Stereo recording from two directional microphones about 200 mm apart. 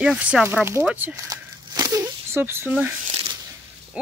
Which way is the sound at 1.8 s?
15° right (ahead or behind).